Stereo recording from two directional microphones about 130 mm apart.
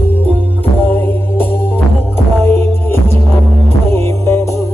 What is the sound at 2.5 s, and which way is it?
Music, 20° left (ahead or behind).